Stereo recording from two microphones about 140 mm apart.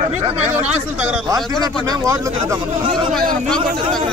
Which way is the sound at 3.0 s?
5° left (ahead or behind).